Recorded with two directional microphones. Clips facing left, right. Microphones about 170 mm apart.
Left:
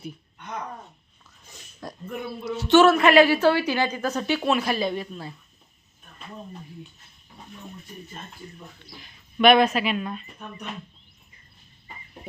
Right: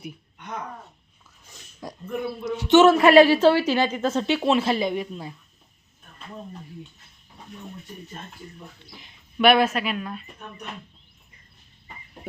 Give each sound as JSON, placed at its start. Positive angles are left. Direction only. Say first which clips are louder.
{"t": 1.8, "sound": "speech", "louder": "right 4 dB", "side_deg": -10}
{"t": 3.1, "sound": "a woman's voice", "louder": "right 3 dB", "side_deg": -30}
{"t": 9.4, "sound": "speech", "louder": "left 1 dB", "side_deg": -5}